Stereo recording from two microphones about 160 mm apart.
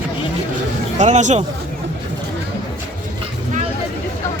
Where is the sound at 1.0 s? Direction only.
50° right (ahead or behind).